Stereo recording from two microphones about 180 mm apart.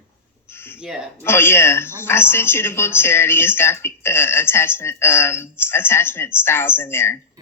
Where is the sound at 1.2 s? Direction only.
15° left (ahead or behind).